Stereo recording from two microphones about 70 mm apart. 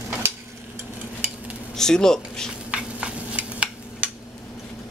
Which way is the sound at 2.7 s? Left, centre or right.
Centre.